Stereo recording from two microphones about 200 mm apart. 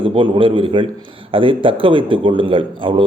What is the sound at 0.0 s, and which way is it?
Speech, 25° right (ahead or behind).